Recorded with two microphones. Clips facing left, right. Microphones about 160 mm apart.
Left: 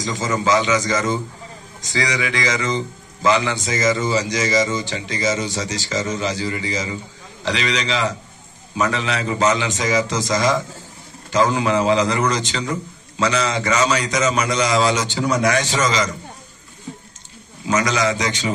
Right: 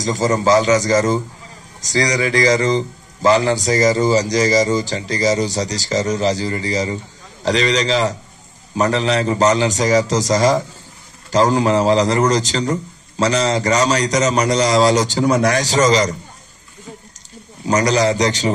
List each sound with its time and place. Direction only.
0.0 s a man's voice: 40° right (ahead or behind)
17.6 s a man's voice: 40° right (ahead or behind)